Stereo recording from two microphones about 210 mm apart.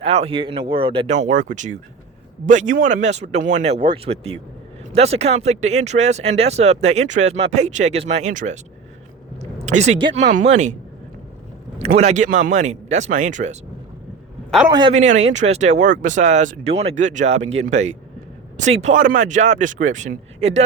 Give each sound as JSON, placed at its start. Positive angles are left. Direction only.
{"t": 0.0, "sound": "speech", "side_deg": -30}
{"t": 9.6, "sound": "speech", "side_deg": -30}
{"t": 11.9, "sound": "speech", "side_deg": -35}
{"t": 14.7, "sound": "speech", "side_deg": -20}
{"t": 14.9, "sound": "speech", "side_deg": -35}